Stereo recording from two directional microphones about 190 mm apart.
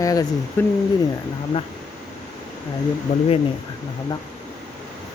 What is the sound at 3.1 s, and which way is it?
Speech, 35° left (ahead or behind).